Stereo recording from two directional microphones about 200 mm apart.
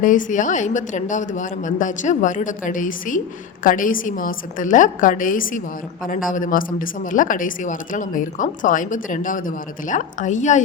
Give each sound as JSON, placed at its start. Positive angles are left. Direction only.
{"t": 0.0, "sound": "a woman's voice", "side_deg": 40}